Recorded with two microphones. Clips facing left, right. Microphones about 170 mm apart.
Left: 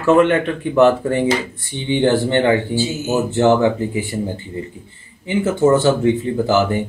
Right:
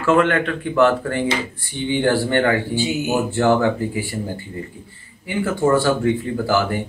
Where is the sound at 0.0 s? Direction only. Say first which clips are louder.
Left 3 dB; 20° left (ahead or behind).